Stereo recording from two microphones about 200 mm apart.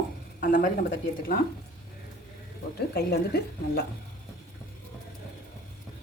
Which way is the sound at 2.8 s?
55° left (ahead or behind).